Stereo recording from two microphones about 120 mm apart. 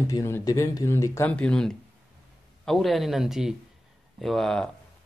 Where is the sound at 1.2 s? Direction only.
10° left (ahead or behind).